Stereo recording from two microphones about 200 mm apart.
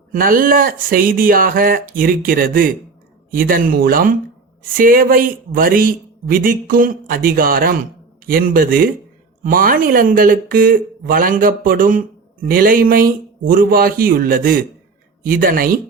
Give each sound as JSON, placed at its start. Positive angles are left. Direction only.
{"t": 0.1, "sound": "speech", "side_deg": -45}